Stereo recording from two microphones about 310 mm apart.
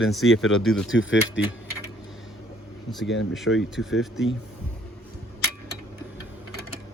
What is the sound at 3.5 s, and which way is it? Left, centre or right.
Speech, left.